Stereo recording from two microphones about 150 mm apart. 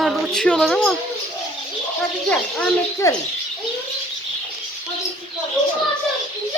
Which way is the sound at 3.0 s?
20° left (ahead or behind).